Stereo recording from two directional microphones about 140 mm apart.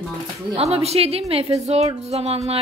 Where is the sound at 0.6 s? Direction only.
50° right (ahead or behind).